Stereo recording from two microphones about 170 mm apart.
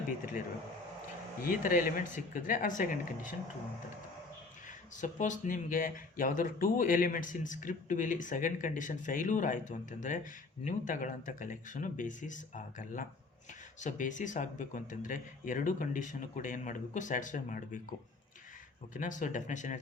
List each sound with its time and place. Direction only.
1.5 s speech: 55° left (ahead or behind)
4.9 s speech: 45° left (ahead or behind)
18.9 s speech: 50° left (ahead or behind)